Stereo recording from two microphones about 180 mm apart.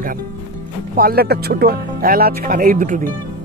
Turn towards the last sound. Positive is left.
turn(degrees=-45)  # may be behind; listen again after turning